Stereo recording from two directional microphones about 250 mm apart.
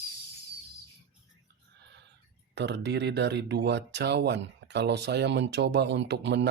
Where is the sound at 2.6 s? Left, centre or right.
Right.